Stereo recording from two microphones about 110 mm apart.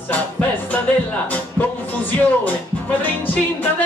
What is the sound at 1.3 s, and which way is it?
Music, 15° left (ahead or behind).